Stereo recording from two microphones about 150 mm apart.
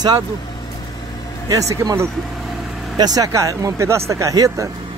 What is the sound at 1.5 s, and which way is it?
Speech, 20° right (ahead or behind).